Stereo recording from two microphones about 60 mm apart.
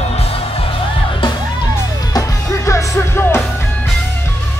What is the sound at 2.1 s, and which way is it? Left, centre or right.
Music, left.